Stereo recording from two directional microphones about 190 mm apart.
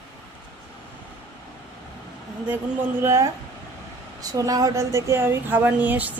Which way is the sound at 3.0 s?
15° right (ahead or behind).